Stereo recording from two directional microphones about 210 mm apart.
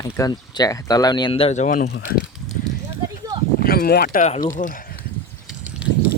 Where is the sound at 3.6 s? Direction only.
45° left (ahead or behind).